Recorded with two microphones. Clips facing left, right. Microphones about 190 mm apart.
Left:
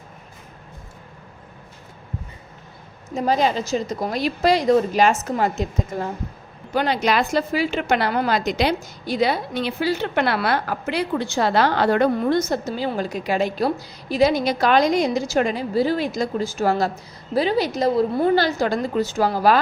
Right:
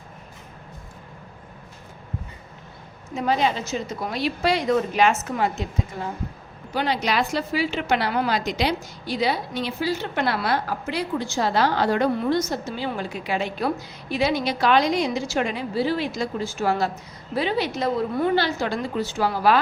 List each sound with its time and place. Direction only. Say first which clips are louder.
3.2 s a woman's voice: left 3 dB; 40° left (ahead or behind)